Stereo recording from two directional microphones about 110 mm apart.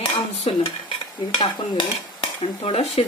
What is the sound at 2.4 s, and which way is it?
Dishes, 60° left (ahead or behind).